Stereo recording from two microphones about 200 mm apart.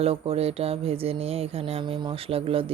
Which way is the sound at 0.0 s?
30° right (ahead or behind).